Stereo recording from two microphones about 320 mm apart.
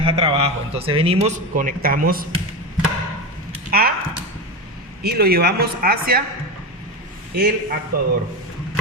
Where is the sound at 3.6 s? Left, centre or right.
Right.